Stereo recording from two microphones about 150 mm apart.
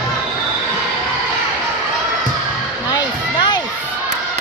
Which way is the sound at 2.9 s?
30° left (ahead or behind).